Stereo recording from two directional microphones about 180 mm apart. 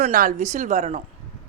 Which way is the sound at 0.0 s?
50° right (ahead or behind).